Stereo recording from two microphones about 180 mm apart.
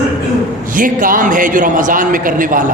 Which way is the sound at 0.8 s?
50° right (ahead or behind).